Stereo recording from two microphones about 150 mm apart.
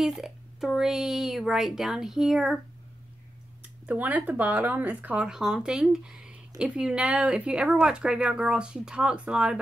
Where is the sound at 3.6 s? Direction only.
10° right (ahead or behind).